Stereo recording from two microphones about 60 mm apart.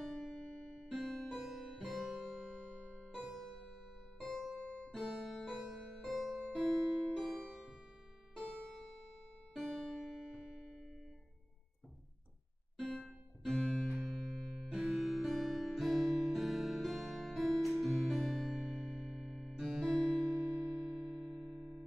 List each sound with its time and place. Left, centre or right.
0.0 s music: centre
0.8 s music: centre
2.4 s music: centre
3.2 s music: centre
4.6 s music: centre
4.9 s keyboard: centre
5.7 s music: centre
9.5 s music: centre
13.4 s music: centre